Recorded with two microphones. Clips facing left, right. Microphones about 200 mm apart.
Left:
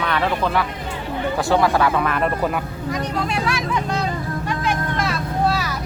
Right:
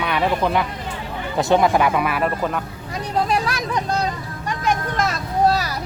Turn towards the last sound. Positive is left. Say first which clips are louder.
# right 2 dB
turn(degrees=-40)  # may be behind; listen again after turning